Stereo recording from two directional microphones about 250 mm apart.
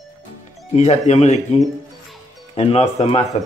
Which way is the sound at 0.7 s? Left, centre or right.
Left.